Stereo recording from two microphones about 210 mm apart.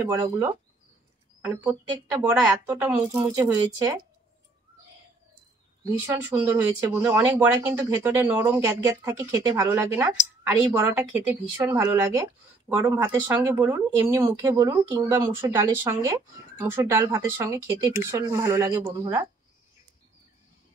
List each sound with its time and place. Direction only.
0.0 s speech: 15° right (ahead or behind)
5.9 s speech: 15° right (ahead or behind)